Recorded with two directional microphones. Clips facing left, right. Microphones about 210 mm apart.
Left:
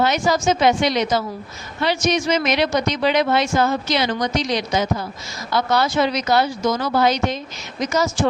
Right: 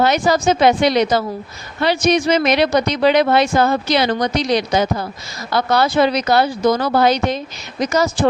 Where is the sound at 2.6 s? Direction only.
65° right (ahead or behind).